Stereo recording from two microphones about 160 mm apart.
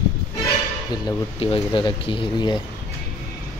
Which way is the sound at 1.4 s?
35° left (ahead or behind).